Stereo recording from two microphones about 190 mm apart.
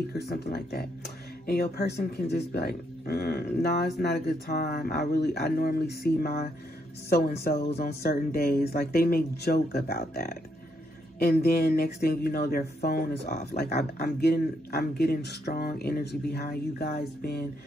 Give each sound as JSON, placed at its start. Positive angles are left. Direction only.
{"t": 0.3, "sound": "speech", "side_deg": 55}
{"t": 13.2, "sound": "speech", "side_deg": 35}
{"t": 13.6, "sound": "speech", "side_deg": 55}